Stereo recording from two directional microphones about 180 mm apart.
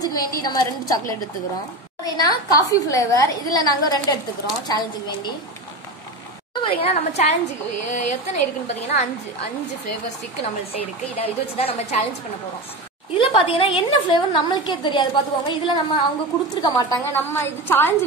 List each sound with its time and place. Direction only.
0.0 s a woman's voice: 20° left (ahead or behind)
6.5 s a woman's voice: 30° left (ahead or behind)
11.1 s a woman's voice: 35° left (ahead or behind)
13.2 s a woman's voice: 30° left (ahead or behind)
16.6 s a woman's voice: 15° left (ahead or behind)